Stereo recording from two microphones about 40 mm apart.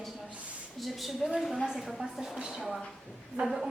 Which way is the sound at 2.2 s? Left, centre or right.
Right.